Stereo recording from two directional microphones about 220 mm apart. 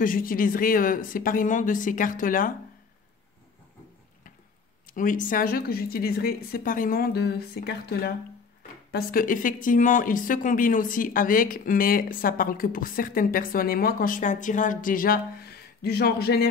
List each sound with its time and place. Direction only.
0.0 s speech: 40° left (ahead or behind)
4.8 s a woman's voice: 35° left (ahead or behind)